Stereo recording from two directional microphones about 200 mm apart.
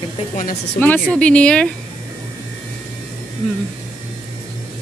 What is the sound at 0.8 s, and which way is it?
Speech, 10° left (ahead or behind).